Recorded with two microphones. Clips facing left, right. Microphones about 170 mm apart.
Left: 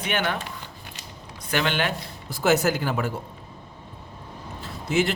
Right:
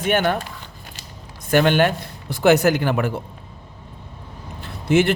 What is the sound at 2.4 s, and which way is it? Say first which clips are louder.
Speech: right 6 dB; 65° right (ahead or behind).